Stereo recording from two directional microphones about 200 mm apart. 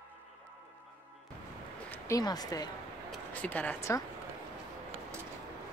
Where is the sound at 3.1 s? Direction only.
5° left (ahead or behind).